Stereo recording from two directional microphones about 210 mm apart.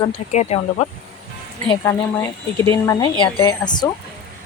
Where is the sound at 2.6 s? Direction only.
10° left (ahead or behind).